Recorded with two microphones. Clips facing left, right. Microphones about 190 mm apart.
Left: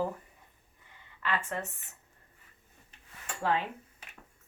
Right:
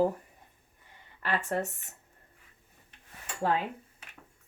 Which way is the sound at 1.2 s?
40° right (ahead or behind).